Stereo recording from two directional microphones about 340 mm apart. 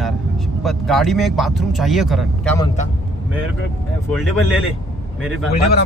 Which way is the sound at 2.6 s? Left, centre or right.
Left.